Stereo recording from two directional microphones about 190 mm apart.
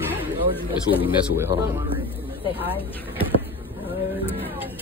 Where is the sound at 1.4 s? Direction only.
15° right (ahead or behind).